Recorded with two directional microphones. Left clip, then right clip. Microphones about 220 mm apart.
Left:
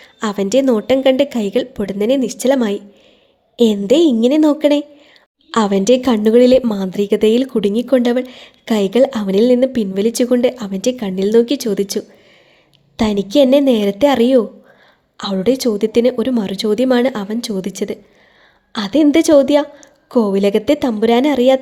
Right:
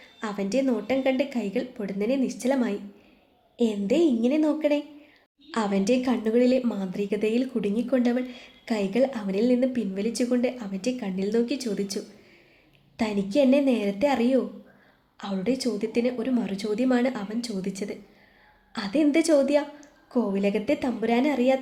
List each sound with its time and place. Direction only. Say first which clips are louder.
0.0 s a woman's voice: left 12 dB; 40° left (ahead or behind)